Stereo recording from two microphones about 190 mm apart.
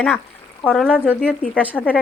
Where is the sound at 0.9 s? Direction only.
10° right (ahead or behind).